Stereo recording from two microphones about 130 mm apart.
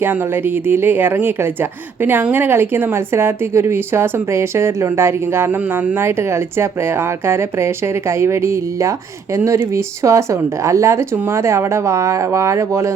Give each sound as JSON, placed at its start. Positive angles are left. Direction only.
{"t": 0.0, "sound": "a woman's voice", "side_deg": -15}